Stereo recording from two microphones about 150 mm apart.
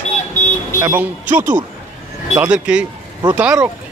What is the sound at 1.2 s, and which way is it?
Speech, 60° right (ahead or behind).